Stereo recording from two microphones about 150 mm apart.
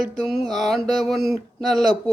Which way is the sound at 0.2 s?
Centre (ahead or behind).